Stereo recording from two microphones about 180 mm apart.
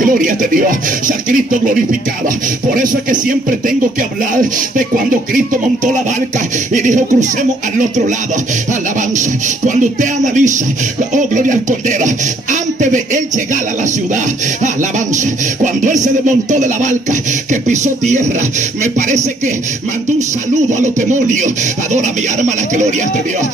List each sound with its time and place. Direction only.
0.0 s music: 50° right (ahead or behind)
6.7 s music: 45° right (ahead or behind)
9.1 s music: 45° right (ahead or behind)
18.8 s music: 40° right (ahead or behind)
20.7 s music: 45° right (ahead or behind)
21.9 s speech: 40° right (ahead or behind)